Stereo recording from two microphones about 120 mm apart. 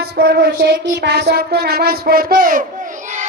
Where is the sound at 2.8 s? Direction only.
90° right.